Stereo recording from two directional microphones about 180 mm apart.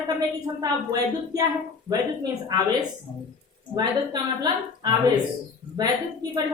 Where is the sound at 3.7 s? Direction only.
20° right (ahead or behind).